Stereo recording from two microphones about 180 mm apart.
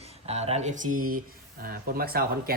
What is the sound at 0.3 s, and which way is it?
Speech, 35° right (ahead or behind).